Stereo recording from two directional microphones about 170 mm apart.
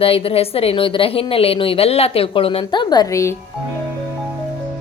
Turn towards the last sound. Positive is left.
turn(degrees=15)  # may be behind; listen again after turning